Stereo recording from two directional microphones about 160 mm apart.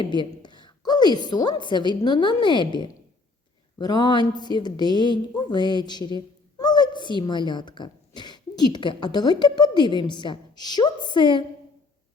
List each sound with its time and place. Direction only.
0.0 s a woman's voice: 30° left (ahead or behind)